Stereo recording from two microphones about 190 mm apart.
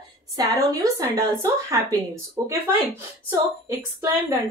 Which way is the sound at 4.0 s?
15° right (ahead or behind).